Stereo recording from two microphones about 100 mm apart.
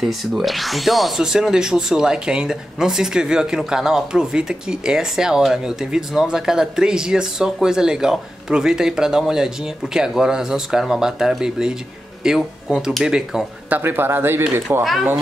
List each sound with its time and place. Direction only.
0.0 s speech: 5° right (ahead or behind)
13.7 s a man's voice: 20° right (ahead or behind)
14.8 s speech: centre (ahead or behind)